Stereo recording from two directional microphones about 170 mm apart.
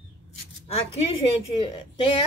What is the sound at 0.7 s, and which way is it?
Speech, 35° left (ahead or behind).